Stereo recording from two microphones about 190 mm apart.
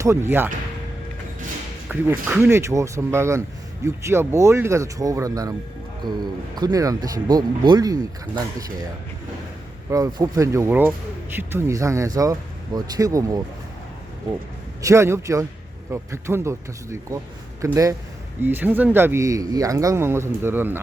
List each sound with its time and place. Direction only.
0.0 s speech: 15° right (ahead or behind)
1.9 s speech: 10° right (ahead or behind)
6.6 s speech: 20° right (ahead or behind)
9.9 s speech: 20° right (ahead or behind)
14.8 s speech: 15° right (ahead or behind)